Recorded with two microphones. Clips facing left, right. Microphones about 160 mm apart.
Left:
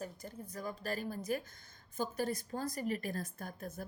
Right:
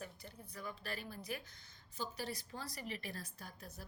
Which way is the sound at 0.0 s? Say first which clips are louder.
Left 7 dB; 45° left (ahead or behind).